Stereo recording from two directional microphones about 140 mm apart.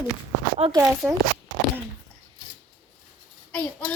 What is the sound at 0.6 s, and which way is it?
Speech, 45° right (ahead or behind).